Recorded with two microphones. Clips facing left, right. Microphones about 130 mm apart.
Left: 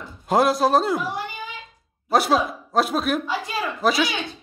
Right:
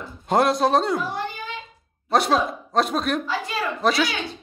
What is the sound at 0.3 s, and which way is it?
A woman's voice, centre (ahead or behind).